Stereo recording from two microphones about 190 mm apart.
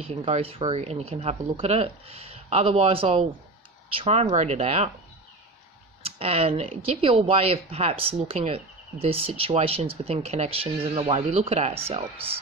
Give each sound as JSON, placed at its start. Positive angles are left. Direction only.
{"t": 0.0, "sound": "speech", "side_deg": -30}
{"t": 6.0, "sound": "speech", "side_deg": -30}